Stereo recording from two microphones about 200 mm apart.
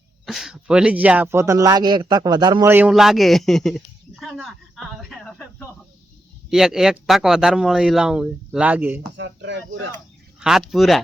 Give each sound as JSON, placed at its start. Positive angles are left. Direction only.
{"t": 0.3, "sound": "speech", "side_deg": 0}
{"t": 2.6, "sound": "speech", "side_deg": -10}
{"t": 6.5, "sound": "speech", "side_deg": -5}
{"t": 9.1, "sound": "speech", "side_deg": -60}
{"t": 10.4, "sound": "speech", "side_deg": 0}